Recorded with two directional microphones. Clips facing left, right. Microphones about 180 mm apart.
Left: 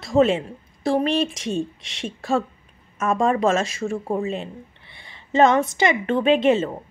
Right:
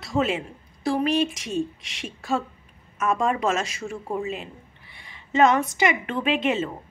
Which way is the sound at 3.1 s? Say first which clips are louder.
Left 6 dB; 30° left (ahead or behind).